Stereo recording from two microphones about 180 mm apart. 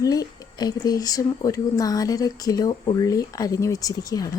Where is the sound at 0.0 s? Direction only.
20° left (ahead or behind).